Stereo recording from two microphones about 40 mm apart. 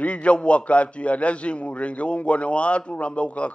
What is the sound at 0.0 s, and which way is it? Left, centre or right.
A man's voice, left.